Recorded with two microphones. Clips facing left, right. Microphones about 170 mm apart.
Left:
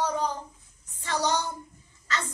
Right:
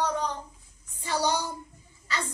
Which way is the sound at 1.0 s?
10° right (ahead or behind).